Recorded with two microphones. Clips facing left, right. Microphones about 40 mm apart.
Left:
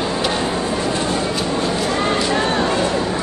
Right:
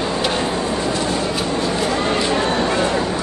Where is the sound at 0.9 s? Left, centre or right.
Left.